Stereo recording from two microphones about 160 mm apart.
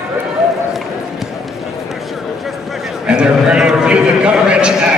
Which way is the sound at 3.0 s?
5° right (ahead or behind).